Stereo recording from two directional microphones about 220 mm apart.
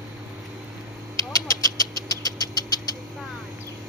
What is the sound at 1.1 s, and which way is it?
Vehicle, 15° left (ahead or behind).